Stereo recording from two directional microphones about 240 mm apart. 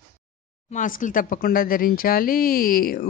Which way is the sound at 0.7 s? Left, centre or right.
Left.